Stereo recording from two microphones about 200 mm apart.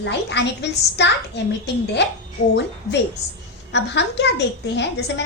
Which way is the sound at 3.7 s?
60° left (ahead or behind).